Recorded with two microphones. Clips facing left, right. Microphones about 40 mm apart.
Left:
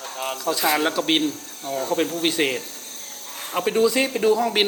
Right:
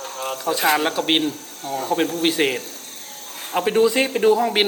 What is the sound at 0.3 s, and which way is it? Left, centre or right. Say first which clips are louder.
Speech: right 2 dB; right.